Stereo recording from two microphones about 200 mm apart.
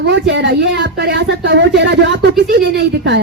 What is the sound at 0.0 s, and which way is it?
Speech, 55° right (ahead or behind).